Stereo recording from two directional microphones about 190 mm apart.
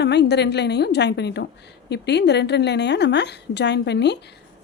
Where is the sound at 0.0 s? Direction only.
65° left (ahead or behind).